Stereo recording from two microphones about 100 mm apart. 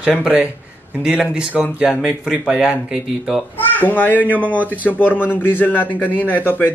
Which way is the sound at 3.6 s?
20° left (ahead or behind).